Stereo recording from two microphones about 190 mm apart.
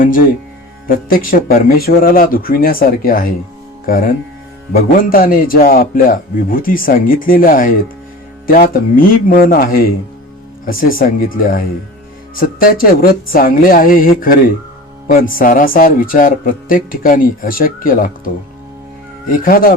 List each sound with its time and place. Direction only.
0.0 s speech: 45° left (ahead or behind)
19.3 s speech: 50° left (ahead or behind)